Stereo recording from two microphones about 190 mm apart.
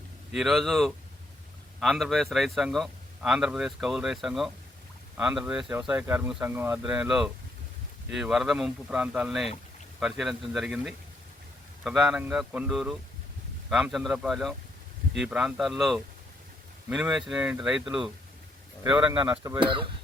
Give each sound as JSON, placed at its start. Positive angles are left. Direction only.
{"t": 0.3, "sound": "a man's voice", "side_deg": 0}
{"t": 19.4, "sound": "speech", "side_deg": -25}